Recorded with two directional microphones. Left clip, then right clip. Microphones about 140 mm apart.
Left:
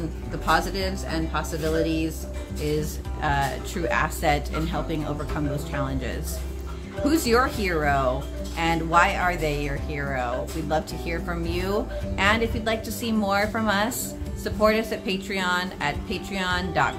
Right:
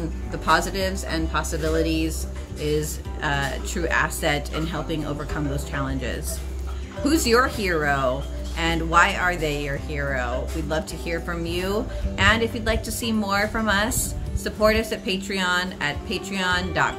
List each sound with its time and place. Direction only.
0.5 s a woman's voice: 15° left (ahead or behind)